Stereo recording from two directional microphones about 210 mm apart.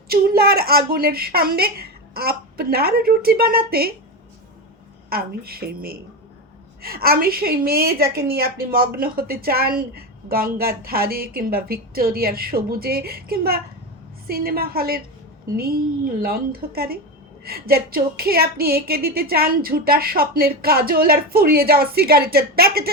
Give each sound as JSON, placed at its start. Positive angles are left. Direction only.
{"t": 0.1, "sound": "a woman's voice", "side_deg": -45}
{"t": 5.0, "sound": "a woman's voice", "side_deg": -45}